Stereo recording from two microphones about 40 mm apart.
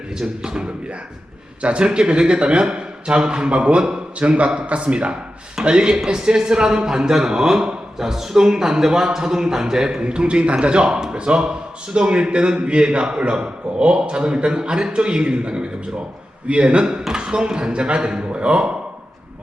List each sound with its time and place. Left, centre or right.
0.2 s a man's voice: right